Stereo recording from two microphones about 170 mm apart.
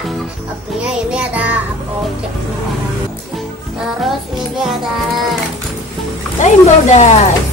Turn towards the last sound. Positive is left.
turn(degrees=45)  # may be behind; listen again after turning